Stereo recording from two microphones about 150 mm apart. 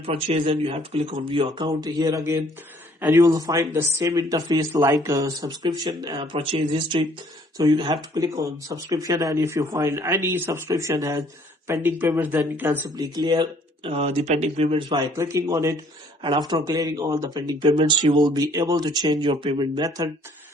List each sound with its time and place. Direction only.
0.1 s speech: 40° right (ahead or behind); by 12.8 s 15° right (ahead or behind)
13.0 s speech: 25° right (ahead or behind)
13.9 s speech: 45° right (ahead or behind)
15.1 s speech: 20° right (ahead or behind)